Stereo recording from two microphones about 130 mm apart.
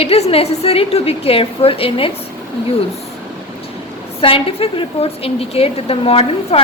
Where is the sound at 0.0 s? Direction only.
50° left (ahead or behind).